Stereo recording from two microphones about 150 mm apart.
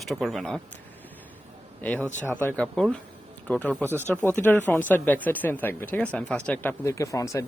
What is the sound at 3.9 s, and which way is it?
Speech, 15° right (ahead or behind).